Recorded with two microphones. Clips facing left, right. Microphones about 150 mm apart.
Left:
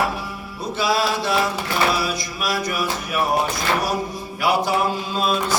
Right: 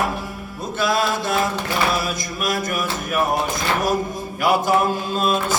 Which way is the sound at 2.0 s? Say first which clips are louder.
Even; 50° right (ahead or behind).